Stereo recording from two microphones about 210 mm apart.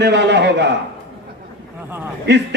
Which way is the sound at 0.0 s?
55° right (ahead or behind).